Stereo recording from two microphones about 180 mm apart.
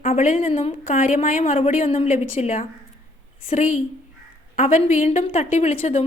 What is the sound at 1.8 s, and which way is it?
Speech, 30° left (ahead or behind).